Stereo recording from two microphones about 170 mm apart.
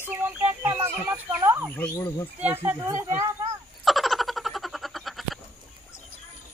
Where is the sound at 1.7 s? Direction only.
10° left (ahead or behind).